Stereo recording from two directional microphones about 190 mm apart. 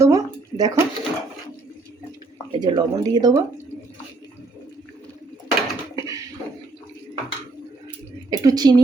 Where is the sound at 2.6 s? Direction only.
20° right (ahead or behind).